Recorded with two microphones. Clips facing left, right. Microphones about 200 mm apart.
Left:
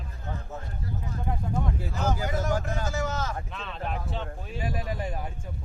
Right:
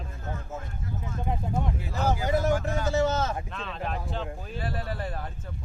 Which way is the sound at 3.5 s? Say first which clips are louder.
Right 1 dB; centre (ahead or behind).